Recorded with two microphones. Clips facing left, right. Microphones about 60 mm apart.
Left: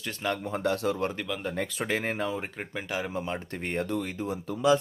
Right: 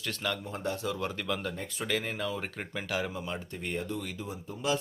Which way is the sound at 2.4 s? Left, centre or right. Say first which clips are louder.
Left 2 dB; centre.